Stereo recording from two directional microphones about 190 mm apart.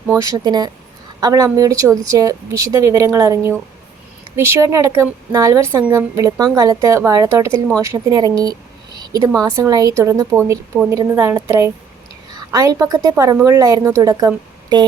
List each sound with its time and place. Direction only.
0.1 s a woman's voice: 15° right (ahead or behind)